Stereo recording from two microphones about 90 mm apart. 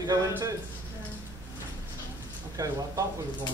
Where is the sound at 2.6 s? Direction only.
40° right (ahead or behind).